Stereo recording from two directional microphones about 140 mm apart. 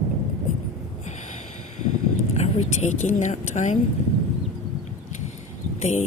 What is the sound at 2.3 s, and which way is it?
Speech, 50° left (ahead or behind).